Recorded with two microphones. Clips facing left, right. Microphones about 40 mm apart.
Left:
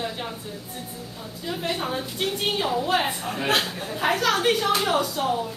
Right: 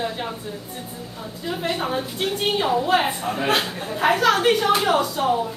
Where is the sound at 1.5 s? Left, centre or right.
Centre.